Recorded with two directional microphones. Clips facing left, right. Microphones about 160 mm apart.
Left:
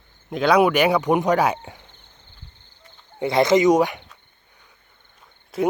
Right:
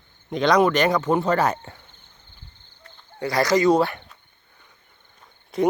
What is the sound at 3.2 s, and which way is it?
Speech, 25° left (ahead or behind).